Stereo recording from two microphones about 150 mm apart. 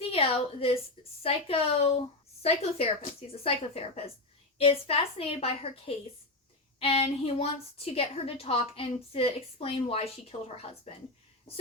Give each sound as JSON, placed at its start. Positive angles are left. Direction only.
{"t": 0.0, "sound": "a woman's voice", "side_deg": 40}